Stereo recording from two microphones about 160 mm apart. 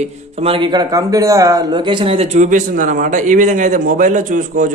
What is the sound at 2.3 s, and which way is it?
A man's voice, 50° right (ahead or behind).